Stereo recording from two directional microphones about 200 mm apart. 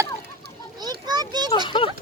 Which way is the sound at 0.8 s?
20° right (ahead or behind).